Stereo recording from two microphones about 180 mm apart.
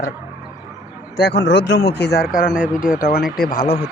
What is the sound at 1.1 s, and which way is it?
A man's voice, 65° left (ahead or behind).